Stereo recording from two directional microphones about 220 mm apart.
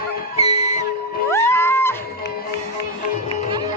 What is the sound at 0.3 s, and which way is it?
Music, 30° left (ahead or behind).